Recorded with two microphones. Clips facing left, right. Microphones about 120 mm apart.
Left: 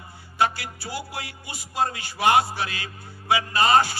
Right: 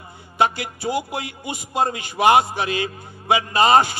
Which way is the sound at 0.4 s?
20° right (ahead or behind).